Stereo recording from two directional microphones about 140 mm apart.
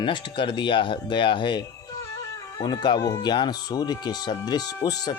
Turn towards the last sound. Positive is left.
turn(degrees=30)  # may be behind; listen again after turning